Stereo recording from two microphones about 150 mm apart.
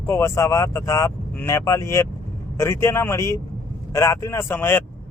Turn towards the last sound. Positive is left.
turn(degrees=15)  # may be behind; listen again after turning